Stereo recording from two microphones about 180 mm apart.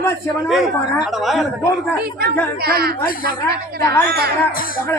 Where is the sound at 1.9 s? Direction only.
60° right (ahead or behind).